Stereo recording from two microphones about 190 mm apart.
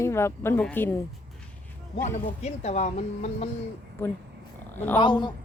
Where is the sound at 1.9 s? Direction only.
35° left (ahead or behind).